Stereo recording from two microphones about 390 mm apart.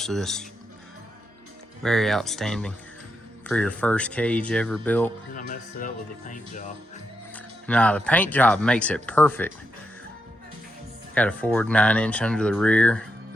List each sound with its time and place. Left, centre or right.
0.0 s speech: centre
1.8 s speech: centre
5.3 s speech: left
7.3 s speech: centre
11.1 s speech: centre